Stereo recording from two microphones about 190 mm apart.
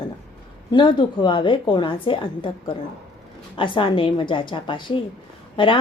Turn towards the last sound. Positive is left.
turn(degrees=25)  # may be behind; listen again after turning